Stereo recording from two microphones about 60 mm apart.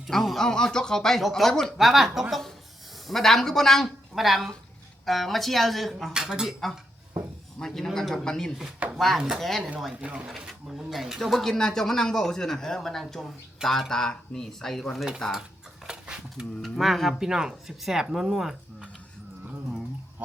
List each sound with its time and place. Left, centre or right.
0.1 s speech: centre
6.1 s speech: centre
7.6 s speech: centre
8.5 s speech: centre
9.0 s speech: centre
9.9 s speech: right
10.2 s speech: centre
15.9 s speech: centre
16.6 s speech: centre